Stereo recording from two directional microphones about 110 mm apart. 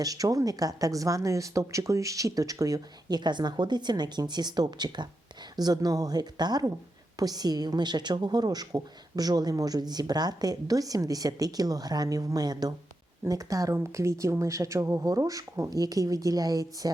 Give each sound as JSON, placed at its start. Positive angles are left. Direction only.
{"t": 0.0, "sound": "a woman's voice", "side_deg": -35}